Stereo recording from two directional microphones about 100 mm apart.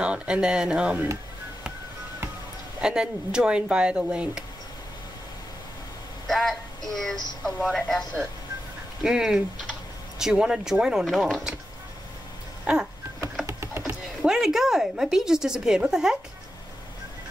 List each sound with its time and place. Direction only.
0.0 s speech: 10° right (ahead or behind)
2.8 s speech: 10° right (ahead or behind)
6.2 s a woman's voice: 5° left (ahead or behind)
13.5 s a sound: 25° right (ahead or behind)
14.2 s a woman's voice: 5° right (ahead or behind)